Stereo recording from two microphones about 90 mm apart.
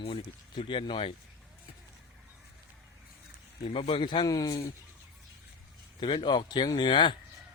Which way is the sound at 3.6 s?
85° left.